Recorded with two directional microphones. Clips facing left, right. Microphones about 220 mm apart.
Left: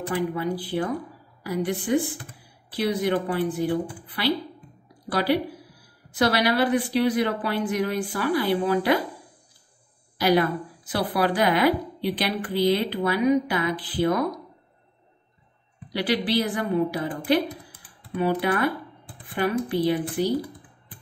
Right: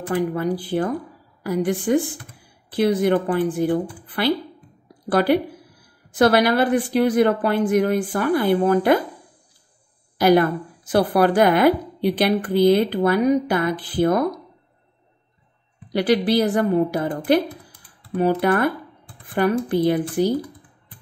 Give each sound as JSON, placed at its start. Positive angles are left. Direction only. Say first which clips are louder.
{"t": 0.3, "sound": "a woman's voice", "louder": "right 4 dB", "side_deg": -45}
{"t": 10.1, "sound": "a woman's voice", "louder": "right 5 dB", "side_deg": -50}
{"t": 15.9, "sound": "a woman's voice", "louder": "right 6 dB", "side_deg": -45}